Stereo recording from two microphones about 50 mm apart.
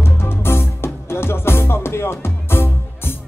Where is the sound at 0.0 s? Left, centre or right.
Left.